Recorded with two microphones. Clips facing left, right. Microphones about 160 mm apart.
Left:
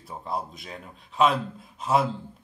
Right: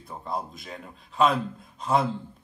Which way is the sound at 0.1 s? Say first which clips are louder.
Left 1 dB; centre (ahead or behind).